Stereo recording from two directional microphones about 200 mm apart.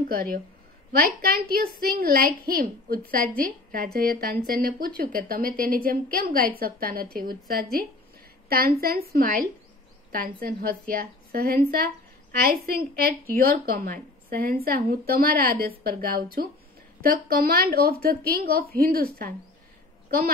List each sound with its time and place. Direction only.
0.1 s a woman's voice: 45° right (ahead or behind)